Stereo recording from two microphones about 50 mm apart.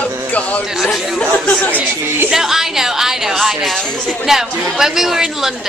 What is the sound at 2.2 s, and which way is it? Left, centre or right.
A woman's voice, centre.